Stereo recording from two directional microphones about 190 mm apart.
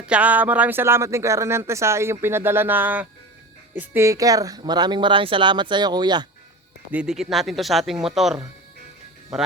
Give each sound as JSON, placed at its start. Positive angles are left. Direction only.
{"t": 0.0, "sound": "speech", "side_deg": -5}
{"t": 6.9, "sound": "speech", "side_deg": -5}